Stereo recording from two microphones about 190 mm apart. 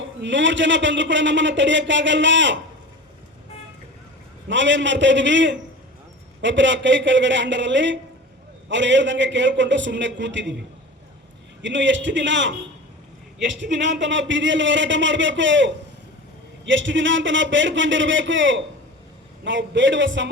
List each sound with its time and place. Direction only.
0.2 s a man's voice: 75° right (ahead or behind)
4.4 s a man's voice: 75° right (ahead or behind)
11.6 s a man's voice: 75° right (ahead or behind)